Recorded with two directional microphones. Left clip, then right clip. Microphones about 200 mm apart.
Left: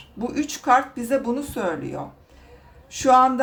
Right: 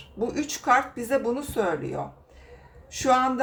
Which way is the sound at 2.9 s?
20° left (ahead or behind).